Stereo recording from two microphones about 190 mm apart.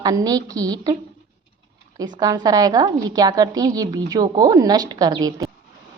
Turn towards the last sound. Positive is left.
turn(degrees=-20)  # may be behind; listen again after turning